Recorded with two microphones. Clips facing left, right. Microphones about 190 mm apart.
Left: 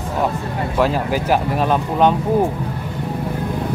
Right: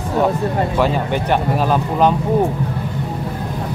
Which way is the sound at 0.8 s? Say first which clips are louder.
Left 3 dB; centre (ahead or behind).